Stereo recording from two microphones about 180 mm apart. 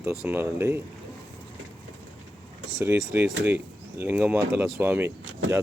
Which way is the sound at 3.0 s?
Centre (ahead or behind).